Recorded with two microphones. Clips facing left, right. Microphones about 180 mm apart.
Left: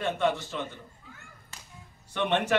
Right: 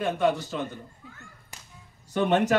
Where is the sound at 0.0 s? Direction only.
10° right (ahead or behind).